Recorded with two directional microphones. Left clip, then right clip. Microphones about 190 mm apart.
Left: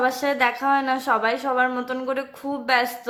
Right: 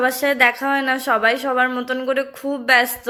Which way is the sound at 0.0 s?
15° right (ahead or behind).